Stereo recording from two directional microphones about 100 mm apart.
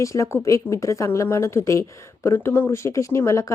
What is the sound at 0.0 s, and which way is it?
A woman's voice, 30° left (ahead or behind).